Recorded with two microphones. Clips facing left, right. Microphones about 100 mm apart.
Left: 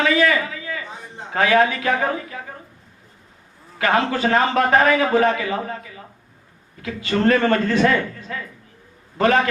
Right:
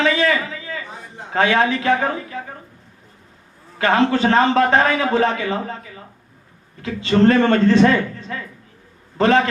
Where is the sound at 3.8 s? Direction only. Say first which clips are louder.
Right 3 dB; 30° right (ahead or behind).